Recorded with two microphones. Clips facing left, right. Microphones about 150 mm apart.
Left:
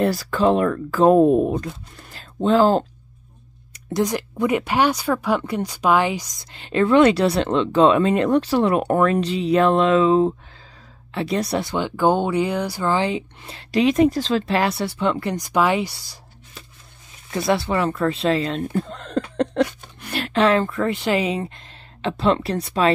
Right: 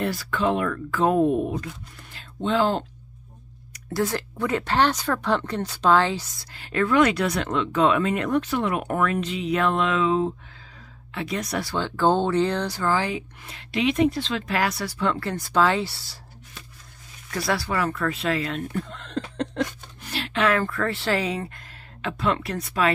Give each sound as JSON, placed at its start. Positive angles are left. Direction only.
{"t": 0.0, "sound": "speech", "side_deg": 40}
{"t": 3.9, "sound": "speech", "side_deg": 15}
{"t": 19.3, "sound": "a sound", "side_deg": 65}
{"t": 20.3, "sound": "speech", "side_deg": 25}